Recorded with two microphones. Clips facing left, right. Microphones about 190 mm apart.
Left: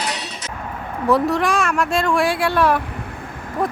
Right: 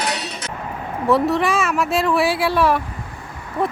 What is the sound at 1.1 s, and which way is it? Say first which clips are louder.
A woman's voice: even; centre (ahead or behind).